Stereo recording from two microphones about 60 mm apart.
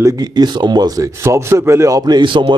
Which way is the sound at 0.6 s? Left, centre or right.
Right.